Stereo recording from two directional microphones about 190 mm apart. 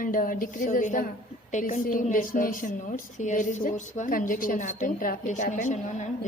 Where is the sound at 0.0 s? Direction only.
45° left (ahead or behind).